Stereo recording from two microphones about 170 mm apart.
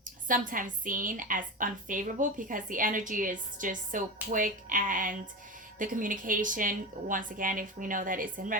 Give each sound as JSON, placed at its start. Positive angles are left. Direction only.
{"t": 0.3, "sound": "a woman's voice", "side_deg": -50}